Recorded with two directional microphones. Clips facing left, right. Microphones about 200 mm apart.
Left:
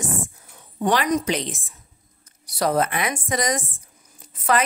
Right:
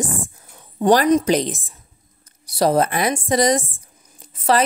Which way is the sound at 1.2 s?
40° right (ahead or behind).